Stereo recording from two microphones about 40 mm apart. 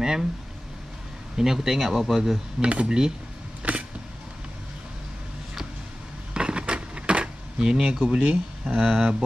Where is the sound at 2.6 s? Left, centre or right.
Right.